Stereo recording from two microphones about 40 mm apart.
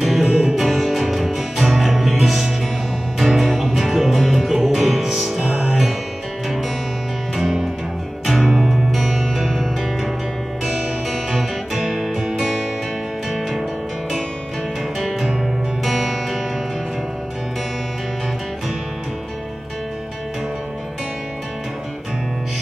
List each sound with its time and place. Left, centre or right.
0.0 s music: centre
5.5 s music: right
7.3 s music: centre
10.6 s music: centre
12.4 s music: centre
15.8 s music: centre